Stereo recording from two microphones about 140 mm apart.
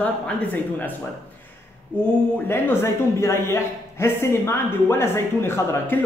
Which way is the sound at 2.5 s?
15° left (ahead or behind).